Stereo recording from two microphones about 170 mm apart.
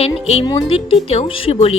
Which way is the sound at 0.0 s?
35° left (ahead or behind).